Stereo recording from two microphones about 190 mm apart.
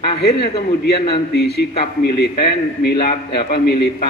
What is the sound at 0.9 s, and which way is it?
A man's voice, 60° left (ahead or behind).